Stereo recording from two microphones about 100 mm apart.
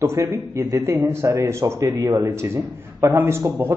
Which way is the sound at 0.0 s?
25° right (ahead or behind).